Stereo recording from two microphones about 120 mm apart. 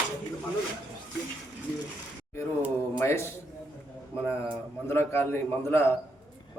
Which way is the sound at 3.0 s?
20° left (ahead or behind).